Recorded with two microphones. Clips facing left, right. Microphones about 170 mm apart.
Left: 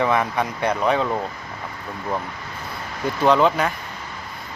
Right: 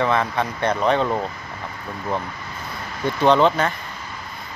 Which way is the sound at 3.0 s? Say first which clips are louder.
Right 1 dB; 5° left (ahead or behind).